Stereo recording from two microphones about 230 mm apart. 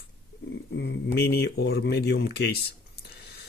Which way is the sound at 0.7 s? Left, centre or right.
Left.